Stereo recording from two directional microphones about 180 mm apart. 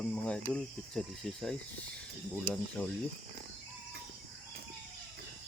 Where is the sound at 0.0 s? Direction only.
5° left (ahead or behind).